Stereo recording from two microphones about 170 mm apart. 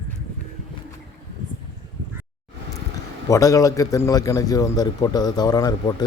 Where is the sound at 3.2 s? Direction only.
20° left (ahead or behind).